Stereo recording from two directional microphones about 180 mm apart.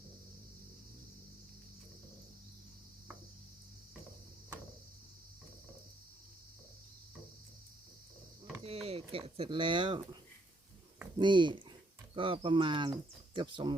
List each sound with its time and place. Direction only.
8.6 s speech: 35° right (ahead or behind)
11.2 s speech: 25° right (ahead or behind)